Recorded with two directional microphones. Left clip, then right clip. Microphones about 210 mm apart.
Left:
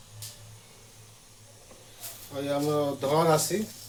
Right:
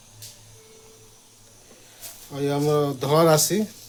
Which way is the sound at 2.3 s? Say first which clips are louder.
Right 5 dB; 50° right (ahead or behind).